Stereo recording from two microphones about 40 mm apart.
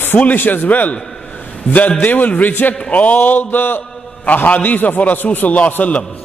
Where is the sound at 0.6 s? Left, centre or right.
Left.